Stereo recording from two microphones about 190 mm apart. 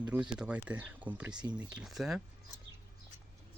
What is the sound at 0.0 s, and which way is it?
Speech, 5° right (ahead or behind).